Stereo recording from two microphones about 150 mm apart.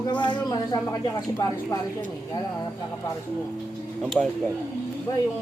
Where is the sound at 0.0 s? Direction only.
30° left (ahead or behind).